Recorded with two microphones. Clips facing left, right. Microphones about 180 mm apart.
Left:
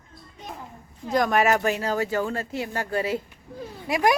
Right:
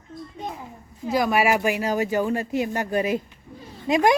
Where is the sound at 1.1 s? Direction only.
5° right (ahead or behind); by 4.1 s 20° right (ahead or behind).